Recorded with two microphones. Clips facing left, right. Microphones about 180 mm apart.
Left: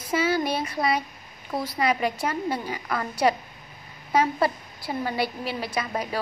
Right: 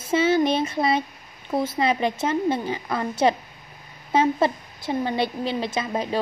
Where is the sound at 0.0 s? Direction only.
25° right (ahead or behind).